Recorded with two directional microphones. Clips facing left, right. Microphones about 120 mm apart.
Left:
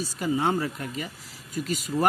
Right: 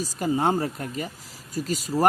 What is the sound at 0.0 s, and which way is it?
Speech, 40° right (ahead or behind).